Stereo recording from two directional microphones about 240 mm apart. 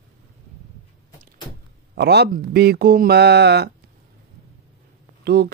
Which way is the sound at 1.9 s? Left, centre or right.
Right.